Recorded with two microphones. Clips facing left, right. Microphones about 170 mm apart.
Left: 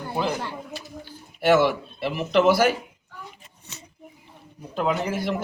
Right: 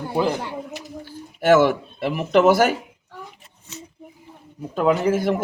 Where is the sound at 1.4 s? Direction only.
45° right (ahead or behind).